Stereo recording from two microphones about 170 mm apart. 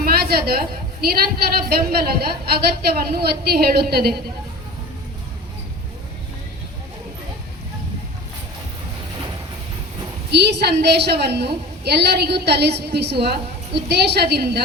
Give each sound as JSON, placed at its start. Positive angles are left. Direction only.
{"t": 0.0, "sound": "a sound", "side_deg": -65}
{"t": 1.0, "sound": "a woman's voice", "side_deg": -65}
{"t": 10.3, "sound": "a woman's voice", "side_deg": -75}